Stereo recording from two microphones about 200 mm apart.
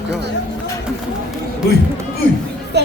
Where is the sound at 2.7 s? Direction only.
60° right (ahead or behind).